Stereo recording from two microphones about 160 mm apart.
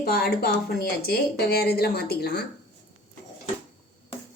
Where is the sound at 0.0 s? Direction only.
85° left.